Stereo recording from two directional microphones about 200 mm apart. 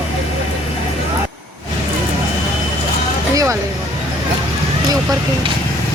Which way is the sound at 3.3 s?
15° right (ahead or behind).